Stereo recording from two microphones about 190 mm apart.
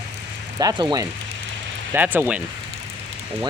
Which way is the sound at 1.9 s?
10° right (ahead or behind).